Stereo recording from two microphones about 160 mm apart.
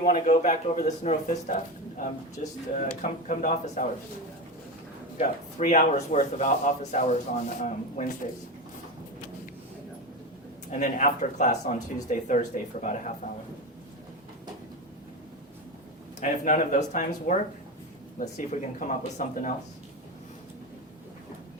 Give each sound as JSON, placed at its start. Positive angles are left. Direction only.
{"t": 0.2, "sound": "speech", "side_deg": 50}
{"t": 5.1, "sound": "speech", "side_deg": 50}
{"t": 10.7, "sound": "speech", "side_deg": 50}
{"t": 16.2, "sound": "speech", "side_deg": 50}